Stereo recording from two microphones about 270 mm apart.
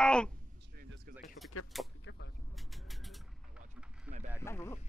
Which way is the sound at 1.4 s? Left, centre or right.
Left.